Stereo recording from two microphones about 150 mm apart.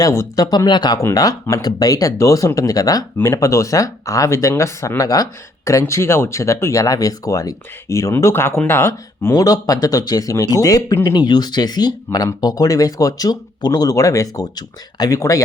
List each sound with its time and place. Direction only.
0.0 s speech: 20° left (ahead or behind)